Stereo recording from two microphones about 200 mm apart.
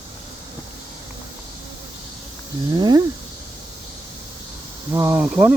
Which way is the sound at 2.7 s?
20° right (ahead or behind).